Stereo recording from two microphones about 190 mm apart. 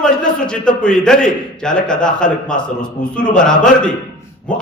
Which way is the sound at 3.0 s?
40° left (ahead or behind).